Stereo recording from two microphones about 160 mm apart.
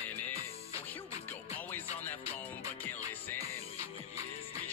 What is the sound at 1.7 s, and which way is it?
Music, 10° left (ahead or behind).